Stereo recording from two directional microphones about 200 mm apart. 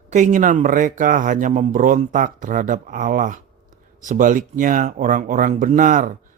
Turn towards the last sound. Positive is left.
turn(degrees=-40)  # may be behind; listen again after turning